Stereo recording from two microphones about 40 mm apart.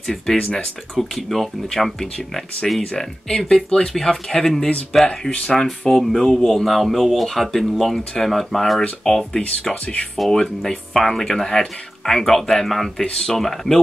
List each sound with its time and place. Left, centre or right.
0.0 s speech: centre
3.3 s speech: centre
5.3 s speech: left
5.6 s speech: centre